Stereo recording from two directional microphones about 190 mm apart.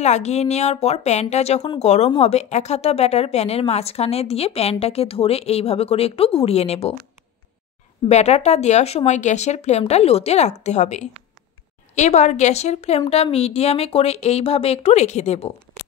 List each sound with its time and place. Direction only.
0.0 s speech: 35° left (ahead or behind)
8.1 s speech: 35° left (ahead or behind)